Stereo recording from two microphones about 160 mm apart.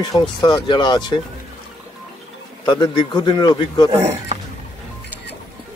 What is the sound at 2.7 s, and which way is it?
Speech, 25° left (ahead or behind).